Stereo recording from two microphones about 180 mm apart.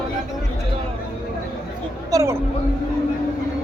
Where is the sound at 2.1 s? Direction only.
20° right (ahead or behind).